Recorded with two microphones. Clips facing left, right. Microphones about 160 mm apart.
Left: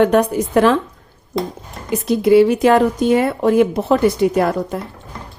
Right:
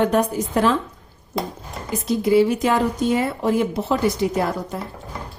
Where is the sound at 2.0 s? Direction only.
65° left (ahead or behind).